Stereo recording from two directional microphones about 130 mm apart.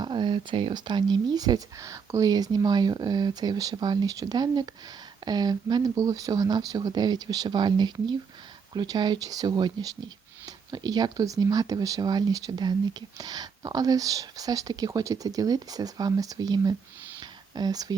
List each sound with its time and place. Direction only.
0.0 s speech: 40° right (ahead or behind)
17.2 s whispering: 30° right (ahead or behind)